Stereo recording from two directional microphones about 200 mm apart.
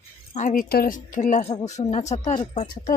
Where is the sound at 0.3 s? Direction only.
40° left (ahead or behind).